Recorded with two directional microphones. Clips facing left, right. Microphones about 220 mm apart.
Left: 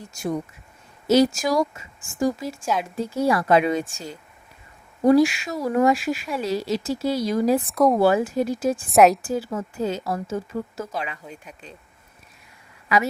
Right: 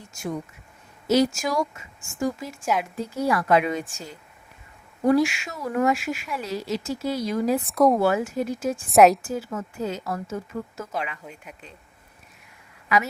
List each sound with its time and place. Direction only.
0.1 s speech: 35° left (ahead or behind)
7.6 s speech: centre (ahead or behind)
8.0 s speech: 30° left (ahead or behind)
8.9 s speech: centre (ahead or behind)
9.2 s speech: 30° left (ahead or behind)